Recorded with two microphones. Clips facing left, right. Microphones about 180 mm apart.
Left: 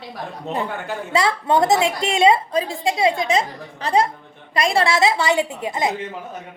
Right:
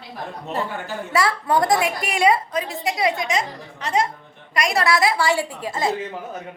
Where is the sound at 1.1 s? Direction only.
25° left (ahead or behind).